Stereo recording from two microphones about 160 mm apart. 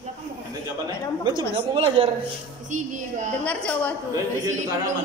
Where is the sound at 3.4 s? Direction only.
10° left (ahead or behind).